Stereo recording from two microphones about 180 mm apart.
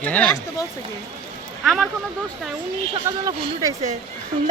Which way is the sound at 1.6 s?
Centre (ahead or behind).